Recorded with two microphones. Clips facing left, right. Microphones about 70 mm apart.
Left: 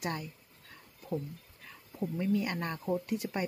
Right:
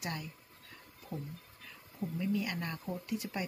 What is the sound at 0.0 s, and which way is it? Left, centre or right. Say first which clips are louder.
Speech: left 4 dB; left.